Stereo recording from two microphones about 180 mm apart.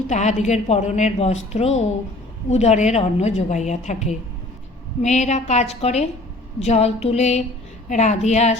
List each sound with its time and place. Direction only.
0.1 s a woman's voice: 40° left (ahead or behind)